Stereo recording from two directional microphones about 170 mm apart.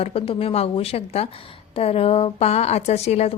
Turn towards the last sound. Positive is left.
turn(degrees=40)  # may be behind; listen again after turning